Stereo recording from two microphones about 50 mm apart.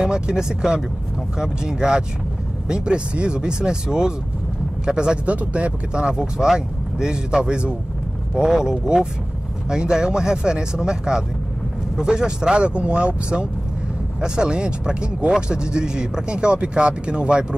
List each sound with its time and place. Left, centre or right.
0.0 s speech: centre